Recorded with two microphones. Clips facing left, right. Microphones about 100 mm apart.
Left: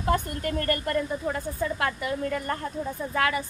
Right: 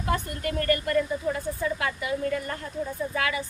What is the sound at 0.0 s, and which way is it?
A woman's voice, 40° left (ahead or behind).